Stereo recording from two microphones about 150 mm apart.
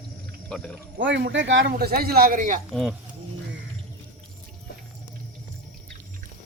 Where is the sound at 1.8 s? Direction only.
90° right; by 2.5 s 65° right (ahead or behind).